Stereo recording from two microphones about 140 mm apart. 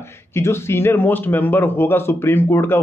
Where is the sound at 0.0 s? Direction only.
20° left (ahead or behind).